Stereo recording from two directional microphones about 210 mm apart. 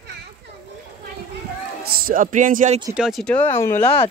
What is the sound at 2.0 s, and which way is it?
Speech, 40° right (ahead or behind).